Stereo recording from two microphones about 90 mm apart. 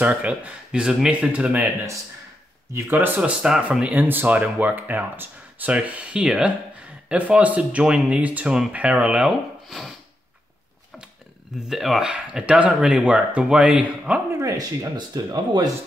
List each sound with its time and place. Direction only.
0.0 s speech: 20° right (ahead or behind)
2.7 s speech: 25° right (ahead or behind)
3.2 s speech: 10° right (ahead or behind)
11.5 s speech: 5° right (ahead or behind)
14.4 s speech: 40° right (ahead or behind)